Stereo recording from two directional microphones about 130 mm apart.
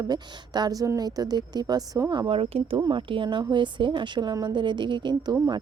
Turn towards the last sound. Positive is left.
turn(degrees=-35)  # may be behind; listen again after turning